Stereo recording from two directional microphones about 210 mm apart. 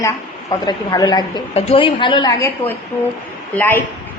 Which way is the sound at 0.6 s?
20° left (ahead or behind).